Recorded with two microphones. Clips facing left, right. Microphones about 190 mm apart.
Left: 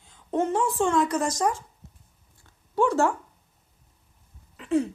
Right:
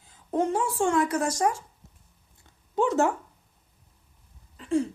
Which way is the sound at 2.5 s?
20° right (ahead or behind).